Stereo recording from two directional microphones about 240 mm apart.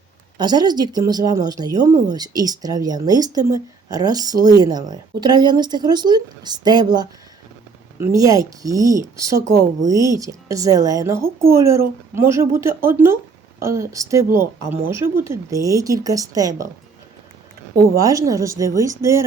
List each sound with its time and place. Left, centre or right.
0.3 s speech: centre
17.7 s speech: centre